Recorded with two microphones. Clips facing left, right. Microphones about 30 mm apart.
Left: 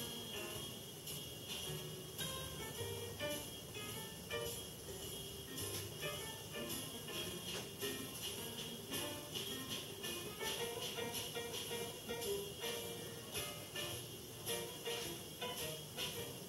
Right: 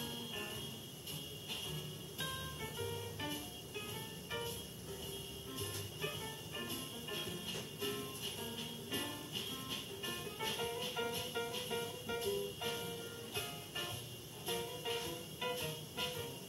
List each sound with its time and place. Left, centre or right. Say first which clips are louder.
0.0 s music: right 3 dB; centre
5.6 s music: right 3 dB; centre